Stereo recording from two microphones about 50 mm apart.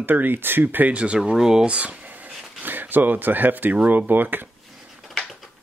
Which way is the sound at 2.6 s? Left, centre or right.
Right.